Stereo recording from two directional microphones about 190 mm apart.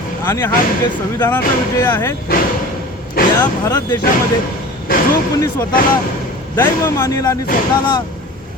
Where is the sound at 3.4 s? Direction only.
15° left (ahead or behind).